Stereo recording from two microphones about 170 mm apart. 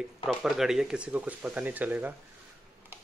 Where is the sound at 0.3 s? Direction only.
Centre (ahead or behind).